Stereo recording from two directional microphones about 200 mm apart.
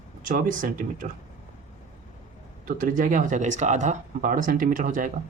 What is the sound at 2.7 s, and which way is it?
Speech, 40° right (ahead or behind).